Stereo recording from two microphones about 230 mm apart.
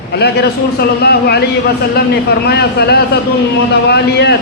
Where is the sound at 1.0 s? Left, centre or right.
Left.